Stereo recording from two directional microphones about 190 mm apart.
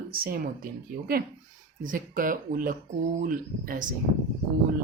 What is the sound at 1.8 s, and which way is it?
Speech, 45° right (ahead or behind).